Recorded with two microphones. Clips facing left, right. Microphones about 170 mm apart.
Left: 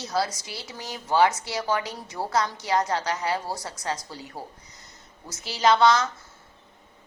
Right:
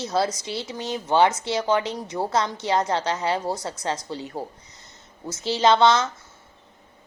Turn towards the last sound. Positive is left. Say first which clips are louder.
# right 2 dB
turn(degrees=-25)  # may be behind; listen again after turning